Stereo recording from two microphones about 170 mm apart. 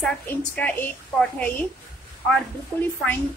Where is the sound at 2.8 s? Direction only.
10° left (ahead or behind).